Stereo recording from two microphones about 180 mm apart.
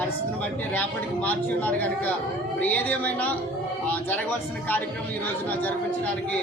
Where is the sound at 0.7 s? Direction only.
10° left (ahead or behind).